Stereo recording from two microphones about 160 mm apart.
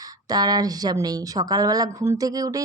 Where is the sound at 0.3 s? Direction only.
25° right (ahead or behind).